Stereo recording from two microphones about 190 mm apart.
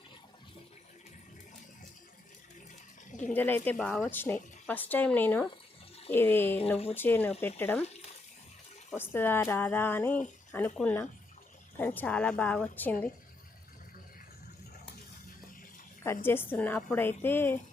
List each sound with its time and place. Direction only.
3.3 s a woman's voice: 10° left (ahead or behind)
9.0 s a woman's voice: 10° left (ahead or behind)
16.0 s a woman's voice: 10° left (ahead or behind)